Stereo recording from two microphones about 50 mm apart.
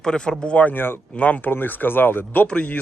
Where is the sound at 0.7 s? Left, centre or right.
Left.